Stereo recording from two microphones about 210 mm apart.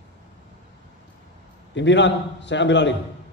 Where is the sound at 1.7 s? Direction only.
60° left (ahead or behind).